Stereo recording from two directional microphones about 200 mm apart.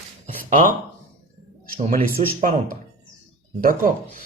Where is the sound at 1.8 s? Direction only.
40° right (ahead or behind).